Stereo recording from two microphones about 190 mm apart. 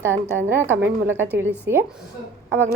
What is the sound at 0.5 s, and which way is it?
A woman's voice, 10° right (ahead or behind).